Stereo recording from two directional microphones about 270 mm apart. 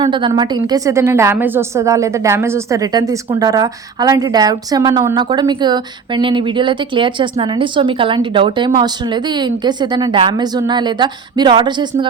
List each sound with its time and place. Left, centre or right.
0.0 s a woman's voice: centre